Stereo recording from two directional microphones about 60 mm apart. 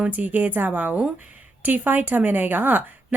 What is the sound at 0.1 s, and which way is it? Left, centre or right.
A woman's voice, right.